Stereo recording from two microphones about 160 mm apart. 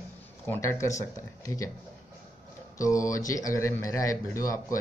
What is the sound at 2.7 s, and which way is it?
Speech, 20° left (ahead or behind).